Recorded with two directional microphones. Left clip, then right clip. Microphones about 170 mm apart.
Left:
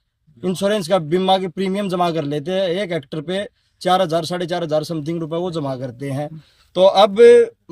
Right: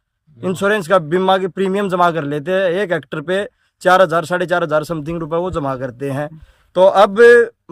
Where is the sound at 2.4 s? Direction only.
35° right (ahead or behind).